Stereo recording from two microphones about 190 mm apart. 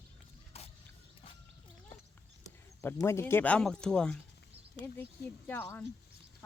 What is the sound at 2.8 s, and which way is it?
Speech, 15° left (ahead or behind).